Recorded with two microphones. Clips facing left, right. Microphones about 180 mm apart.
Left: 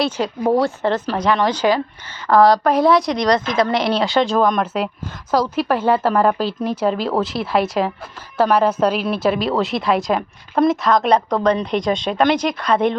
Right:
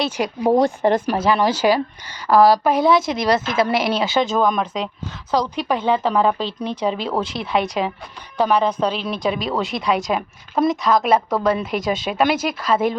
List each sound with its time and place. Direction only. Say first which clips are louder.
0.2 s a woman's voice: right 4 dB; 15° right (ahead or behind)